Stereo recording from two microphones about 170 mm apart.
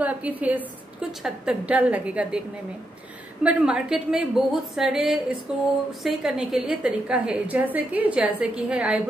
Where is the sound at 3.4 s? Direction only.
5° right (ahead or behind).